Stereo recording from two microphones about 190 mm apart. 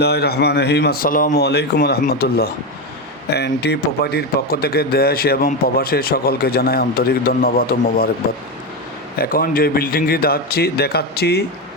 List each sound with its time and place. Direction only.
0.0 s speech: 60° left (ahead or behind)
9.1 s speech: 50° left (ahead or behind)